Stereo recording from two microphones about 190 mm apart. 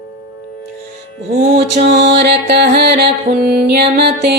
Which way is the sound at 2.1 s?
60° right (ahead or behind).